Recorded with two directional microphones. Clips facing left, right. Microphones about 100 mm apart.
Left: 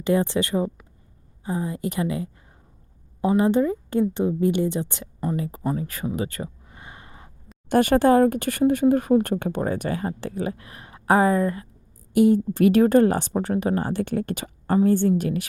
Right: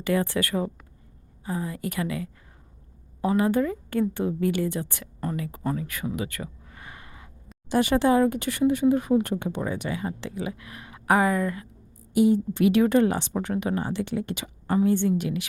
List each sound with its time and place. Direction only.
0.0 s speech: 25° left (ahead or behind)
6.1 s a sound: 30° left (ahead or behind)
7.7 s speech: 50° left (ahead or behind); by 11.7 s 30° left (ahead or behind)
12.1 s speech: 50° left (ahead or behind)